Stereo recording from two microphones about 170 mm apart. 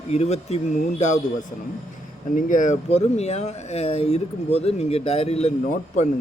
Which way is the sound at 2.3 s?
50° left (ahead or behind).